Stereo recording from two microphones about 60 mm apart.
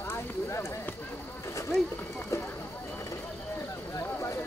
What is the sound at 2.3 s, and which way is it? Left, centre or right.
Clip-clop, left.